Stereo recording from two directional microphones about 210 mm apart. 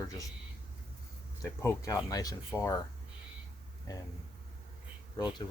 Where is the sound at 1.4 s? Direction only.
15° left (ahead or behind).